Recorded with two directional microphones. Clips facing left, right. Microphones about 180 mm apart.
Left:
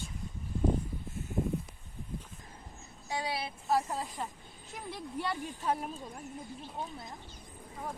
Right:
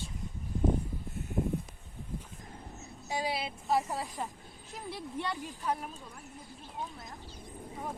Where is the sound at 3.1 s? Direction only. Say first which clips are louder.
Right 2 dB; 20° right (ahead or behind).